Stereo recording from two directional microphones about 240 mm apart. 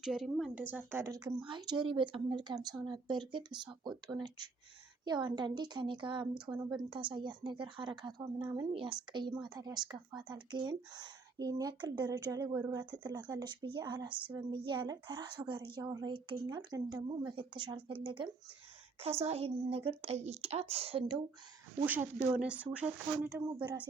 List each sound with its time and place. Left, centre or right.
0.0 s a woman's voice: centre; by 21.2 s right
21.8 s speech: centre